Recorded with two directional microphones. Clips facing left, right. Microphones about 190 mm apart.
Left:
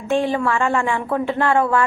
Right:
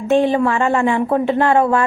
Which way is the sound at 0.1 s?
20° right (ahead or behind).